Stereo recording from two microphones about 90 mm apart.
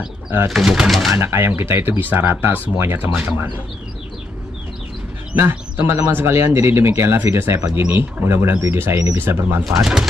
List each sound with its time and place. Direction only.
0.5 s speech: 5° right (ahead or behind)
1.1 s speech: 30° right (ahead or behind)
5.3 s speech: 25° right (ahead or behind)
9.7 s speech: 5° right (ahead or behind)